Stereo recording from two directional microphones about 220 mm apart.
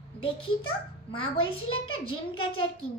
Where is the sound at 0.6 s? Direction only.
25° left (ahead or behind).